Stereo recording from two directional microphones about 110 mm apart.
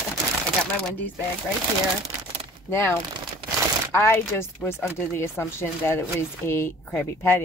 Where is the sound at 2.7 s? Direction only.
20° left (ahead or behind).